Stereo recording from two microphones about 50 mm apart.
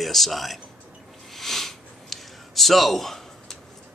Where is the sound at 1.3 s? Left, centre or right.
Centre.